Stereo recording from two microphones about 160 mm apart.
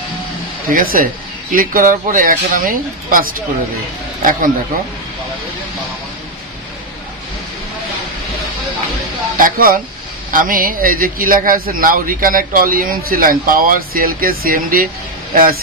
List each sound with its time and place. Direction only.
0.7 s a man's voice: 60° right (ahead or behind)
9.4 s a man's voice: 60° right (ahead or behind)